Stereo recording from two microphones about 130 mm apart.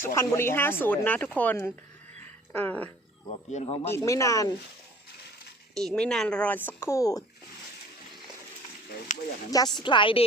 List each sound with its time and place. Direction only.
0.0 s speech: 25° left (ahead or behind)
3.5 s speech: 55° left (ahead or behind)
3.9 s speech: 25° left (ahead or behind)
5.7 s speech: 5° left (ahead or behind); by 7.3 s 25° left (ahead or behind)
9.1 s speech: 75° left (ahead or behind)
9.7 s speech: 35° left (ahead or behind)